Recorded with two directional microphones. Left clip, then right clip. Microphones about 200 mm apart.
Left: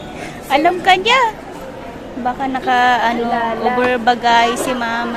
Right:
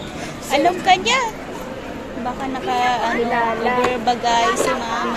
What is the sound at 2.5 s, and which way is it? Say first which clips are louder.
Speech: left 6 dB; 25° left (ahead or behind).